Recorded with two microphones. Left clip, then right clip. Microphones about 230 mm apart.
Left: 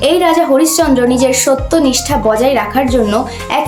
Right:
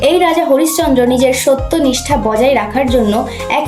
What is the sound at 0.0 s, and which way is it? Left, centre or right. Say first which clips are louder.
Speech: even; centre.